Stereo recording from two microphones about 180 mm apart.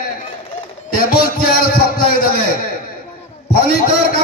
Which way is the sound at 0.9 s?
55° left (ahead or behind).